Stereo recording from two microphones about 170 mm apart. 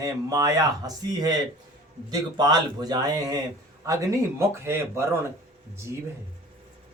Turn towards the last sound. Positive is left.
turn(degrees=-15)  # may be behind; listen again after turning